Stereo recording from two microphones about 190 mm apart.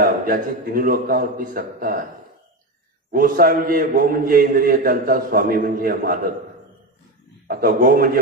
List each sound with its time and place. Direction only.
0.0 s a man's voice: 50° right (ahead or behind)
3.1 s a man's voice: 50° right (ahead or behind)
7.4 s a man's voice: 50° right (ahead or behind)